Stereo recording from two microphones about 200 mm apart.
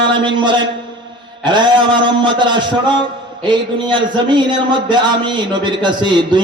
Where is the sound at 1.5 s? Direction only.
25° right (ahead or behind).